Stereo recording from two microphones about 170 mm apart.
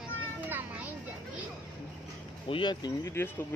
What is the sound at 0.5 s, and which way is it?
Children playing, 10° right (ahead or behind).